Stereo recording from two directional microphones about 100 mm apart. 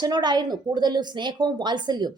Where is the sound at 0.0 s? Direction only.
45° right (ahead or behind).